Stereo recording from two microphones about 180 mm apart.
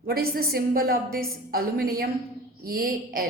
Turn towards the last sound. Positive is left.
turn(degrees=-55)  # may be behind; listen again after turning